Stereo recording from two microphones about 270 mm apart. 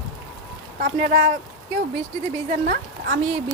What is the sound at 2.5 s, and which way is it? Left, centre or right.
Speech, right.